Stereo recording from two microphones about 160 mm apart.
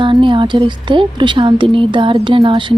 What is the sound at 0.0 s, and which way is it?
A woman's voice, 30° right (ahead or behind).